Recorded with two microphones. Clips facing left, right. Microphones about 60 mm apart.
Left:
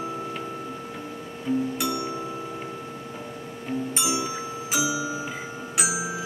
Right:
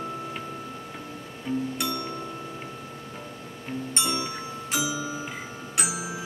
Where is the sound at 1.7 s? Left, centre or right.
Centre.